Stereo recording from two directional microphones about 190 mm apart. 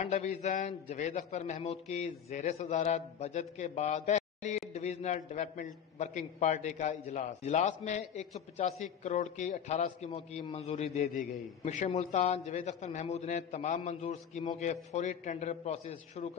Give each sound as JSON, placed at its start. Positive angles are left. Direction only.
{"t": 0.0, "sound": "a man's voice", "side_deg": 35}